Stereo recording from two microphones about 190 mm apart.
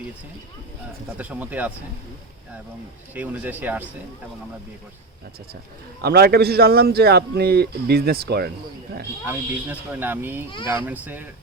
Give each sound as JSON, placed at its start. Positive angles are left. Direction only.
{"t": 1.2, "sound": "speech", "side_deg": -10}
{"t": 3.2, "sound": "speech", "side_deg": -10}
{"t": 6.0, "sound": "a man's voice", "side_deg": -55}
{"t": 9.2, "sound": "speech", "side_deg": -10}